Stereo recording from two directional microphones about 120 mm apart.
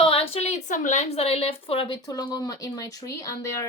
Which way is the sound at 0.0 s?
55° left (ahead or behind).